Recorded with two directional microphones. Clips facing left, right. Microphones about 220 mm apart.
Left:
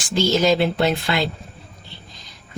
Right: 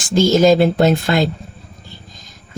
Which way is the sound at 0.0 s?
45° right (ahead or behind).